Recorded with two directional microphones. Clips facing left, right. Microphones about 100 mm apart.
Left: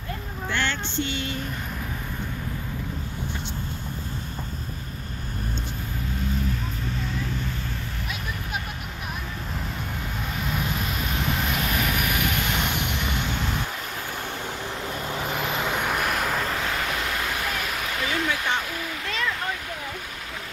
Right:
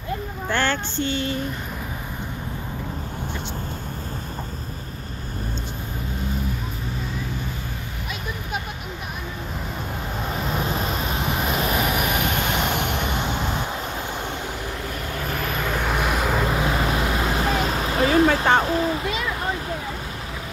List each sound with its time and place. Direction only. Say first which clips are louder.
0.5 s child singing: right 5 dB; 45° right (ahead or behind)
10.3 s train: right 4 dB; 30° right (ahead or behind)
13.3 s vehicle: right 3 dB; 25° right (ahead or behind)
14.7 s vehicle: even; 20° left (ahead or behind)
15.8 s vehicle: right 2 dB; 5° right (ahead or behind)
16.4 s vehicle: right 5 dB; 20° right (ahead or behind)
18.3 s a sound: right 8 dB; 50° right (ahead or behind)
18.6 s a sound: right 10 dB; 30° right (ahead or behind)
19.0 s a sound: right 3 dB; 15° right (ahead or behind)